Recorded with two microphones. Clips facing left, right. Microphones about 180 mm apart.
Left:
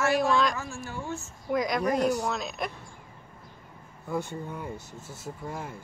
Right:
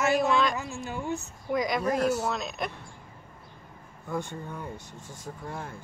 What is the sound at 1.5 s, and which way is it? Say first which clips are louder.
Speech: left 1 dB; centre (ahead or behind).